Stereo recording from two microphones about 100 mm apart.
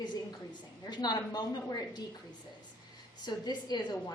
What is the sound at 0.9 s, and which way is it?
A woman's voice, 45° left (ahead or behind).